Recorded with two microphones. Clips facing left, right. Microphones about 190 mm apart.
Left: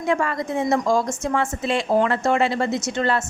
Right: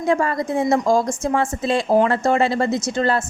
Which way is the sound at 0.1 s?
35° right (ahead or behind).